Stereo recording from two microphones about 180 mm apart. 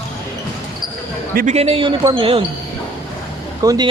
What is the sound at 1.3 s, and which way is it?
A man's voice, 40° right (ahead or behind).